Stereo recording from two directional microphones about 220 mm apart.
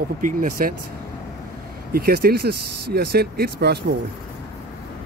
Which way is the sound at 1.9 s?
45° right (ahead or behind).